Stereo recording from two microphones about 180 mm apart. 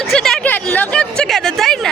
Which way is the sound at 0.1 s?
5° left (ahead or behind).